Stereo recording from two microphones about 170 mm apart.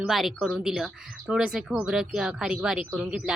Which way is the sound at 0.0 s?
Centre (ahead or behind).